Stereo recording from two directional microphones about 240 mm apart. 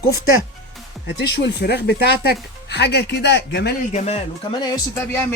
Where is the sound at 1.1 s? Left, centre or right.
Left.